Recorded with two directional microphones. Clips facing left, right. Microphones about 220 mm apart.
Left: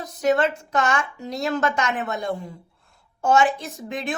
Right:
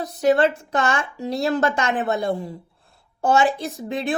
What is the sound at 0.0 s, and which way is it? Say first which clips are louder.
Speech: right 3 dB; 35° right (ahead or behind).